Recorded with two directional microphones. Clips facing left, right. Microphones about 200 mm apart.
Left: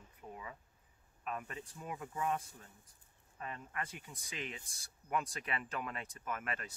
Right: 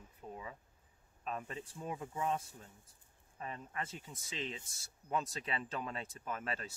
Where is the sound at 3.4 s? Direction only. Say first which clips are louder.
Right 1 dB; 25° right (ahead or behind).